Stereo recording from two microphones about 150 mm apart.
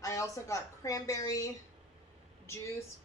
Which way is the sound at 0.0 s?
20° left (ahead or behind).